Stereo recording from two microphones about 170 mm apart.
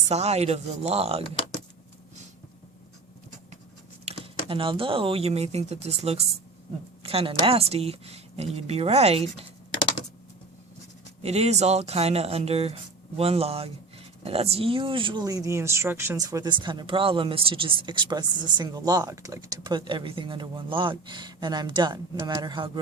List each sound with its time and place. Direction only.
0.1 s speech: 40° right (ahead or behind)
4.0 s computer keyboard: 35° right (ahead or behind)
4.4 s speech: 30° right (ahead or behind)
11.2 s speech: 40° right (ahead or behind)